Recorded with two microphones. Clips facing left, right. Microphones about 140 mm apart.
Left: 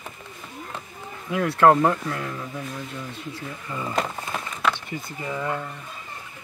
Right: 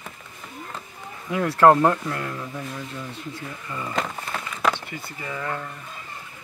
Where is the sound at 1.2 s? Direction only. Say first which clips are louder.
Right 1 dB; centre (ahead or behind).